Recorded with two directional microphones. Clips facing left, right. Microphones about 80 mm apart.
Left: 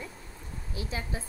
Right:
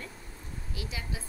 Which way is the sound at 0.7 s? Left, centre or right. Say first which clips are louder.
Left 4 dB; left.